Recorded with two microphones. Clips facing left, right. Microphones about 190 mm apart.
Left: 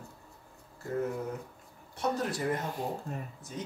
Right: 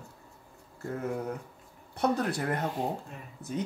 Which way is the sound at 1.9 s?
60° right (ahead or behind).